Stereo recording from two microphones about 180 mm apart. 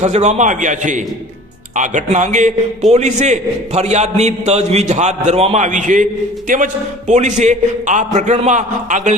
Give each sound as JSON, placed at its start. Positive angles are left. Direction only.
{"t": 0.0, "sound": "a man's voice", "side_deg": -40}
{"t": 7.1, "sound": "a man's voice", "side_deg": -40}